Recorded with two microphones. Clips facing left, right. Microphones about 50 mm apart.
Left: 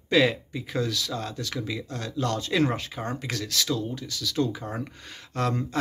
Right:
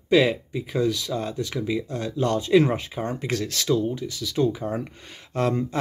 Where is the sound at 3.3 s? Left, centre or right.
Right.